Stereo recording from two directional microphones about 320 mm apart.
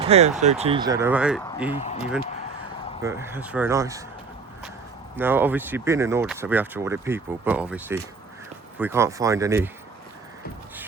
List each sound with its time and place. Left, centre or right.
0.0 s speech: centre
1.7 s speech: centre
3.0 s speech: centre
5.1 s speech: centre